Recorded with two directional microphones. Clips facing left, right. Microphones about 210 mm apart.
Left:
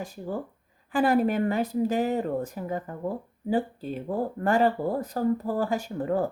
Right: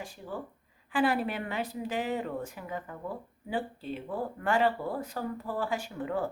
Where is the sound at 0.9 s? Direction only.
45° left (ahead or behind).